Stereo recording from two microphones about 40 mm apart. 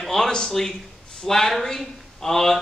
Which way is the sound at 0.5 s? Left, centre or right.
Centre.